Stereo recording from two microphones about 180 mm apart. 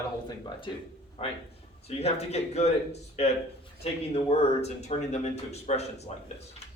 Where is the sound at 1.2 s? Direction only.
30° left (ahead or behind).